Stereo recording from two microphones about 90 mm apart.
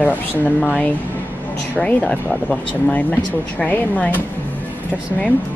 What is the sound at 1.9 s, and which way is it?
Speech, 10° left (ahead or behind).